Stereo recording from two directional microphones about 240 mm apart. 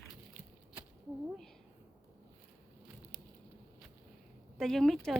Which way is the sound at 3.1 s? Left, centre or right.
Centre.